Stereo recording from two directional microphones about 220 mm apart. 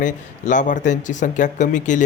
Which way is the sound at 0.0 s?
35° left (ahead or behind).